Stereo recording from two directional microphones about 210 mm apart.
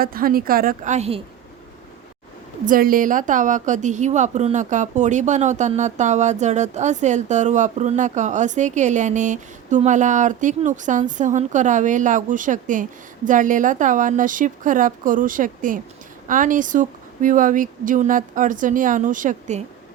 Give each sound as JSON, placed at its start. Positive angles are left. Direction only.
{"t": 0.0, "sound": "a woman's voice", "side_deg": -45}
{"t": 2.6, "sound": "a woman's voice", "side_deg": -40}